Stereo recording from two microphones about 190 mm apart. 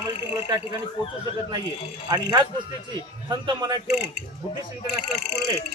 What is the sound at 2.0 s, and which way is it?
Speech, 20° right (ahead or behind).